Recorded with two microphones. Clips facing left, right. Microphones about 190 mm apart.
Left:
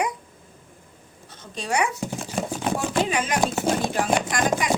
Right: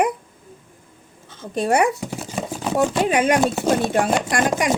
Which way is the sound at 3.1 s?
60° right (ahead or behind).